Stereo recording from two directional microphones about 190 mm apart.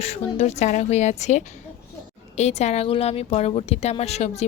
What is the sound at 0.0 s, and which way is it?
A woman's voice, 35° left (ahead or behind).